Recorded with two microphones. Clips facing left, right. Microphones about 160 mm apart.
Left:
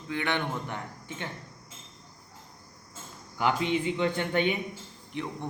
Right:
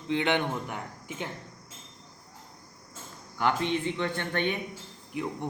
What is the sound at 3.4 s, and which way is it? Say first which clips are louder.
Speech: even; 10° left (ahead or behind).